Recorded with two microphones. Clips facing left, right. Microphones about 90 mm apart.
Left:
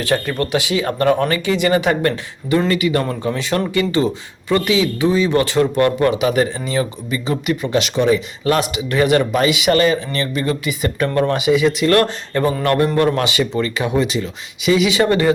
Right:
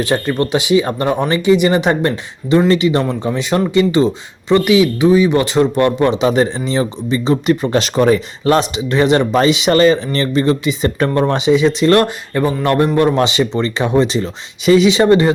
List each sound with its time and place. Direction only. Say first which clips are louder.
0.0 s speech: right 3 dB; 20° right (ahead or behind); by 8.5 s 40° right (ahead or behind)
8.5 s speech: right 3 dB; 25° right (ahead or behind)
12.0 s speech: right 1 dB; 15° right (ahead or behind)
12.6 s speech: right 3 dB; 25° right (ahead or behind)